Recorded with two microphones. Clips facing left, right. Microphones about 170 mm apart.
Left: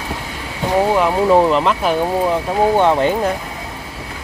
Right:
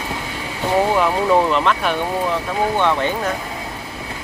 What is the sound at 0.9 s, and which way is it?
Speech, 15° left (ahead or behind).